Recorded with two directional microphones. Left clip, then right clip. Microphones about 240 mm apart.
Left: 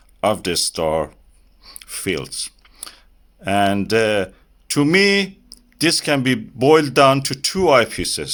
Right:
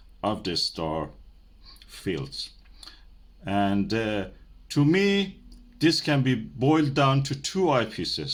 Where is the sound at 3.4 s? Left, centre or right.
Left.